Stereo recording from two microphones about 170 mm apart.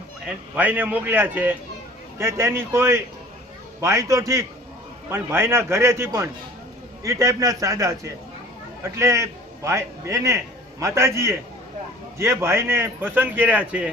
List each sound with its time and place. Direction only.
0.5 s a man's voice: 10° right (ahead or behind)